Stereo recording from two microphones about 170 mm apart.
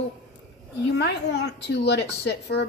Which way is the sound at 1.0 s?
80° left.